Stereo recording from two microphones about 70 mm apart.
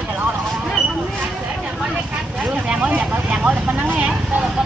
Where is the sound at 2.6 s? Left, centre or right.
Centre.